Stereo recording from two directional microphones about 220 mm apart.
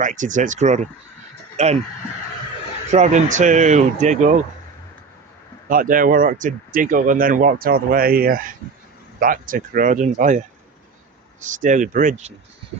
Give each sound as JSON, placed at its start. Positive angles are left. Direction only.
{"t": 0.0, "sound": "speech", "side_deg": -35}
{"t": 2.9, "sound": "speech", "side_deg": -35}
{"t": 5.6, "sound": "speech", "side_deg": -40}